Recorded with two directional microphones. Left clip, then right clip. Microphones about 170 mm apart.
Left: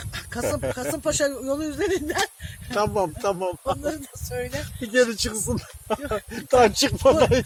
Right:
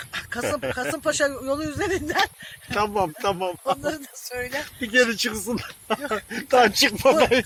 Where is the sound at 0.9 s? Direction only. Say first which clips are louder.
Right 1 dB; 15° left (ahead or behind).